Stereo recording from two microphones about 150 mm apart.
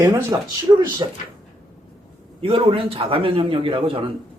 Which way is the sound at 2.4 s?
40° right (ahead or behind).